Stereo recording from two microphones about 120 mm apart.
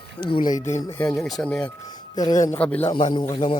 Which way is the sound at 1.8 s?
35° left (ahead or behind).